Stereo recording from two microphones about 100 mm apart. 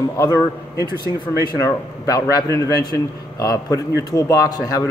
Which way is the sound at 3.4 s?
35° left (ahead or behind).